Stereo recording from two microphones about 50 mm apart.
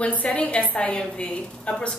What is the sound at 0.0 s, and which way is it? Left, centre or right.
A woman's voice, left.